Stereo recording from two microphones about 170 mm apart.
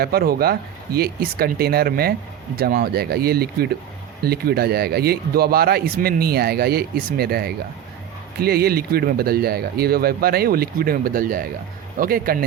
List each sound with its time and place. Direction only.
0.0 s speech: 65° right (ahead or behind)